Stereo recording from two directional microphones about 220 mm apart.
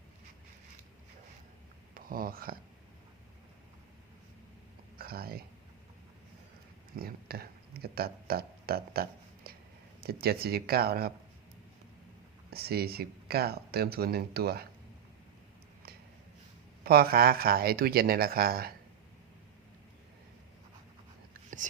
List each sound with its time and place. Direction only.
2.0 s speech: 40° right (ahead or behind)
4.9 s a sound: 45° right (ahead or behind)
6.9 s a sound: 45° right (ahead or behind)
10.0 s speech: 45° right (ahead or behind)
12.5 s speech: 45° right (ahead or behind)
16.8 s speech: 45° right (ahead or behind)
21.6 s speech: 35° right (ahead or behind)